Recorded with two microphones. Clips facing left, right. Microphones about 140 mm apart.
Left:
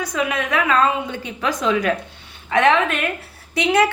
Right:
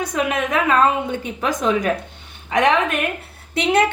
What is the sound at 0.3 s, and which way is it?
Speech, 20° right (ahead or behind).